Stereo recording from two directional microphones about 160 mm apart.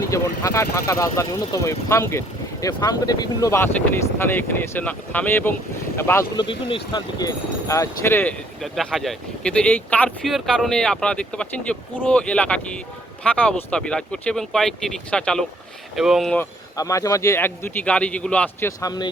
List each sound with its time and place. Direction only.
0.0 s speech: 20° left (ahead or behind)
6.7 s speech: 30° left (ahead or behind); by 16.4 s centre (ahead or behind)
16.4 s speech: 20° left (ahead or behind)
18.8 s speech: 25° left (ahead or behind)